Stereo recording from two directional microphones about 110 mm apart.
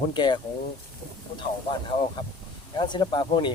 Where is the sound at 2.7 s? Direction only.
45° left (ahead or behind).